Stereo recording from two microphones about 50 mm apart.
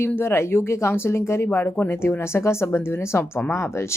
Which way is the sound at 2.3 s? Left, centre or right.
Left.